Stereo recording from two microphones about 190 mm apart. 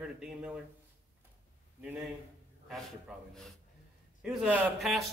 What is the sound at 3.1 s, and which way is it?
A man's voice, centre (ahead or behind).